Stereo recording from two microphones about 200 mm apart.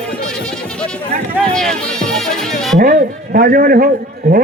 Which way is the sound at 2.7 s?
45° right (ahead or behind).